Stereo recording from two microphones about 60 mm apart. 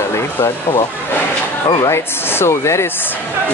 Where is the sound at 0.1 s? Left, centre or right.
Left.